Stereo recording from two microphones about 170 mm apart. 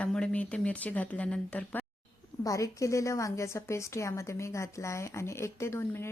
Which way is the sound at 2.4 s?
20° left (ahead or behind).